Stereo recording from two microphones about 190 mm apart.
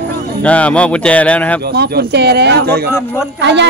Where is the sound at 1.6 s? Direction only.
55° right (ahead or behind).